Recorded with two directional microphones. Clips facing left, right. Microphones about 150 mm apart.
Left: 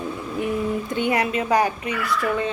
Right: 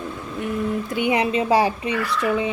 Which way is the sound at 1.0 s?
20° right (ahead or behind).